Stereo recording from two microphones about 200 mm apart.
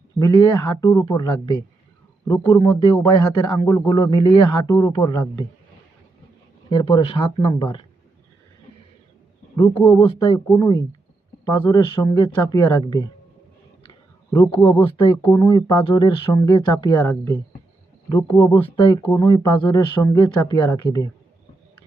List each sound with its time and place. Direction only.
0.2 s speech: 15° left (ahead or behind)
6.7 s speech: 20° left (ahead or behind)
7.0 s speech: 30° left (ahead or behind)
9.6 s speech: 20° left (ahead or behind)
14.3 s speech: 15° left (ahead or behind)
14.5 s speech: 25° left (ahead or behind)